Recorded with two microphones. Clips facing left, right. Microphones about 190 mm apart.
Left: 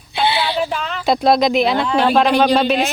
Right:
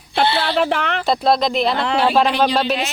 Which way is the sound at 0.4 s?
65° right (ahead or behind).